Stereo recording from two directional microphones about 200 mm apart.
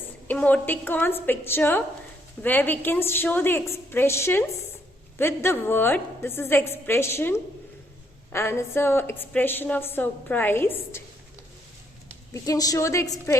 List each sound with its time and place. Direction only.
0.3 s a woman's voice: 5° left (ahead or behind)
12.3 s a woman's voice: 15° left (ahead or behind)